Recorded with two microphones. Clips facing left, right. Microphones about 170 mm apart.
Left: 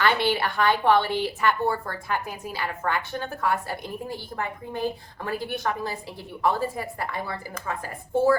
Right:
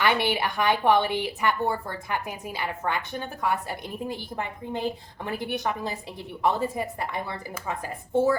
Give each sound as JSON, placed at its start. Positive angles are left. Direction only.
{"t": 0.0, "sound": "a woman's voice", "side_deg": -15}